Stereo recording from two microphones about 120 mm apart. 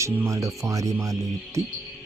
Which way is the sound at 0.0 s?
25° right (ahead or behind).